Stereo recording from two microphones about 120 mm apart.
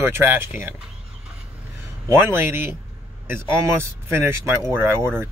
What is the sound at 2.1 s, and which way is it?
Speech, 20° right (ahead or behind).